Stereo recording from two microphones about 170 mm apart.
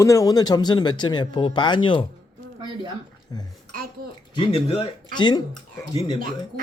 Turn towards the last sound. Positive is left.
turn(degrees=25)  # may be behind; listen again after turning